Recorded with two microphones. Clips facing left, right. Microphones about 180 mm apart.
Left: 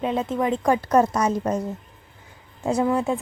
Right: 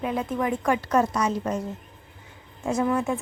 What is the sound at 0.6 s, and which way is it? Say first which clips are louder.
Speech: left 4 dB; 35° left (ahead or behind).